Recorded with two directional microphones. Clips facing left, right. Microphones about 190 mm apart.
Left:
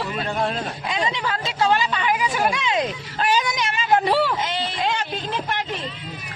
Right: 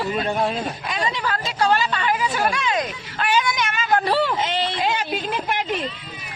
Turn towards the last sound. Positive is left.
turn(degrees=-15)  # may be behind; listen again after turning